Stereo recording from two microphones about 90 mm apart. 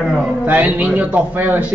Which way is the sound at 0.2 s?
15° right (ahead or behind).